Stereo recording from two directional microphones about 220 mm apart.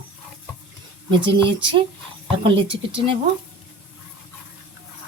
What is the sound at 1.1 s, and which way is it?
Speech, 20° right (ahead or behind).